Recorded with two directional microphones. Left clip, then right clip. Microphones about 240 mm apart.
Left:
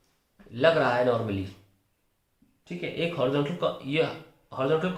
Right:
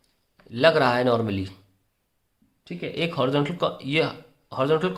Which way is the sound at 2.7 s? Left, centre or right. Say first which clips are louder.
Right 2 dB; right.